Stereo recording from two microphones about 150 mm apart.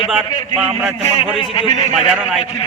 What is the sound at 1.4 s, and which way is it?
Speech, 35° left (ahead or behind).